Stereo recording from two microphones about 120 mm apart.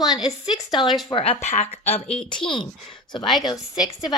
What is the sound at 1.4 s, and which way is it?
Speech, 70° left (ahead or behind).